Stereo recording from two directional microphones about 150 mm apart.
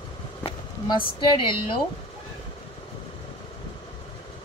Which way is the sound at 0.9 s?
35° left (ahead or behind).